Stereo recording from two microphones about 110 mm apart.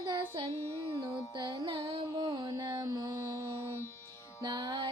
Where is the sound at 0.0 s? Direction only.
50° right (ahead or behind).